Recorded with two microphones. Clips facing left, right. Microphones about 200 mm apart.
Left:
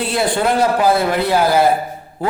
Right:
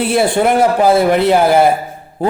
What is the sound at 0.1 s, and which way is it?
A man's voice, 25° right (ahead or behind).